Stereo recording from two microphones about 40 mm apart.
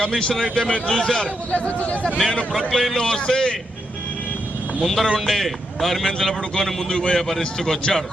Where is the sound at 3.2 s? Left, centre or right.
Centre.